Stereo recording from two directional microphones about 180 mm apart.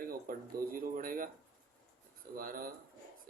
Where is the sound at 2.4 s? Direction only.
50° right (ahead or behind).